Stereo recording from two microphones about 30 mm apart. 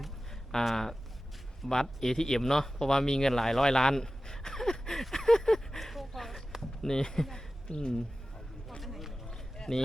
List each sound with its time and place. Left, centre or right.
0.5 s speech: centre
1.7 s speech: centre
5.1 s a sound: centre
6.6 s speech: left
7.7 s speech: left
8.8 s run: centre
9.2 s a sound: left